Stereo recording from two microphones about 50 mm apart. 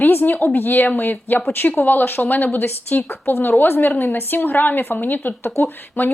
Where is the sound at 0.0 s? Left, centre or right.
Left.